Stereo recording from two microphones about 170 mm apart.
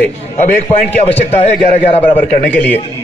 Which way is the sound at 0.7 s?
35° left (ahead or behind).